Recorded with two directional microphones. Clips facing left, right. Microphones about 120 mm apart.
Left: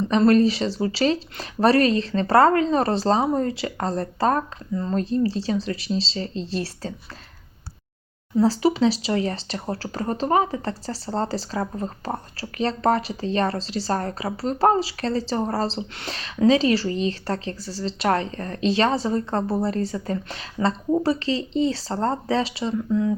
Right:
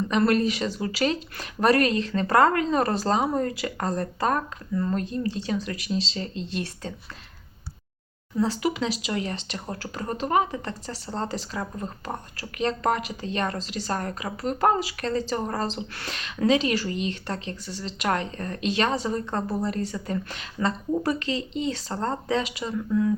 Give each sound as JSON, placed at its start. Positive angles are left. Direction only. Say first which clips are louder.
{"t": 0.1, "sound": "speech", "louder": "left 6 dB", "side_deg": 35}
{"t": 8.4, "sound": "speech", "louder": "left 6 dB", "side_deg": 35}